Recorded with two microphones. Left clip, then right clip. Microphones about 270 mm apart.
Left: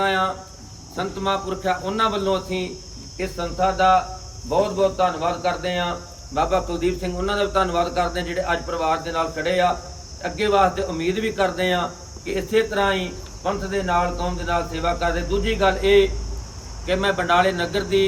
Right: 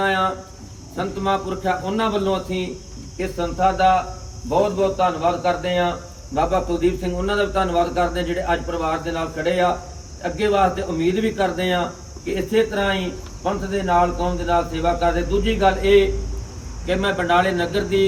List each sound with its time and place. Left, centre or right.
0.0 s speech: centre